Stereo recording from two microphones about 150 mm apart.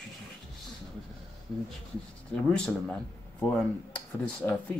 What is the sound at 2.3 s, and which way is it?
A man's voice, 5° left (ahead or behind).